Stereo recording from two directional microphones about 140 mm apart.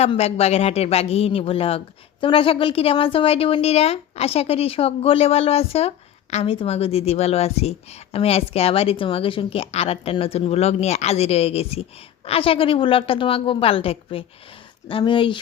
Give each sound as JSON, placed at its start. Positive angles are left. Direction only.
{"t": 0.0, "sound": "a woman's voice", "side_deg": 50}